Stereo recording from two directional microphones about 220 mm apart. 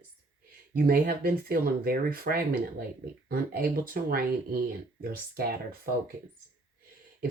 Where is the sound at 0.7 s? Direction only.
40° right (ahead or behind).